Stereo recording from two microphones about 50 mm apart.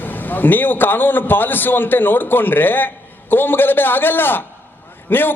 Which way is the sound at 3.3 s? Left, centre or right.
Left.